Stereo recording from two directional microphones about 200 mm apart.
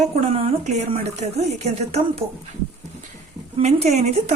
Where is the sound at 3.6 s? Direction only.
35° right (ahead or behind).